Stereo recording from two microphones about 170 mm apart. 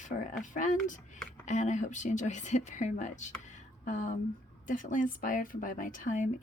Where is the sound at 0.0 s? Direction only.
50° left (ahead or behind).